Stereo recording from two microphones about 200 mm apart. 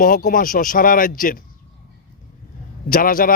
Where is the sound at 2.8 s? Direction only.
45° left (ahead or behind).